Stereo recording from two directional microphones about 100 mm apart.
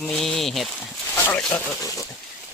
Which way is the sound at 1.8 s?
35° left (ahead or behind).